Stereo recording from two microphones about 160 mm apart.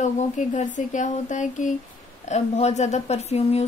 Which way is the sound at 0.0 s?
50° left (ahead or behind).